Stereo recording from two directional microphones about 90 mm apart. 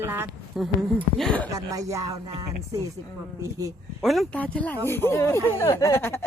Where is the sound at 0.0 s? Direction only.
25° right (ahead or behind).